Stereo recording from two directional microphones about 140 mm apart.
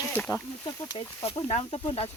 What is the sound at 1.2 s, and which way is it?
Speech, 45° left (ahead or behind).